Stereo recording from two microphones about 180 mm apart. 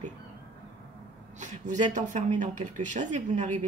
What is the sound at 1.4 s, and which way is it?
Speech, 40° right (ahead or behind).